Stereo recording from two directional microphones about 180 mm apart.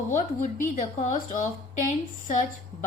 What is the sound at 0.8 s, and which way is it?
Speech, 45° left (ahead or behind).